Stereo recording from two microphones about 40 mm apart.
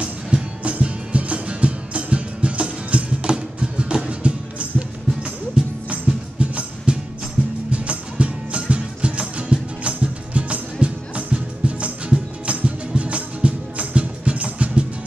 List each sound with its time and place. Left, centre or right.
0.0 s music: right